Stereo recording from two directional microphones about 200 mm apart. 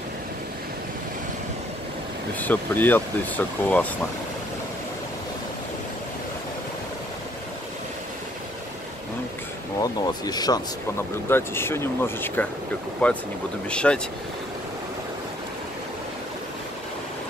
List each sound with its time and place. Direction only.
2.4 s speech: 10° left (ahead or behind)
9.8 s speech: 20° left (ahead or behind)